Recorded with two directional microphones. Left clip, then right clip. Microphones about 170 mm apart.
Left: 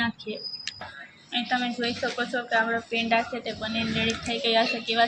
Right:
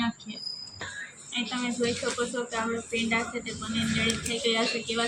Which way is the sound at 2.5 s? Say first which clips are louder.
Left 6 dB; 25° left (ahead or behind).